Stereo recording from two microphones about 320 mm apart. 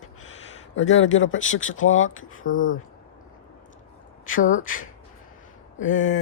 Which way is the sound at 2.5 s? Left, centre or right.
Left.